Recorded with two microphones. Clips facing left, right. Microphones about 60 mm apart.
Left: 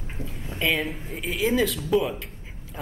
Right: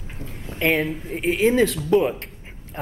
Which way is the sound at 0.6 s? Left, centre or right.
Right.